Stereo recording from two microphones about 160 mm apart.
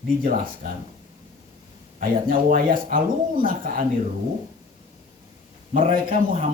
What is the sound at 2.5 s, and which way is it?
A man's voice, 60° right (ahead or behind).